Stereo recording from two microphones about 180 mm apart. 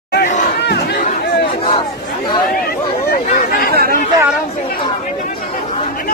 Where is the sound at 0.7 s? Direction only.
65° left (ahead or behind).